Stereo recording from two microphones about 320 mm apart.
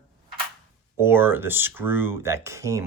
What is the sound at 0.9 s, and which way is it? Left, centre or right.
Speech, centre.